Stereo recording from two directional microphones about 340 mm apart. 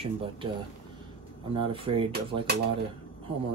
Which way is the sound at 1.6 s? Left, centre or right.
Centre.